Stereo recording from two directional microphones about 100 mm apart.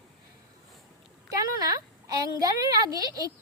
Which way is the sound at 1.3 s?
40° right (ahead or behind).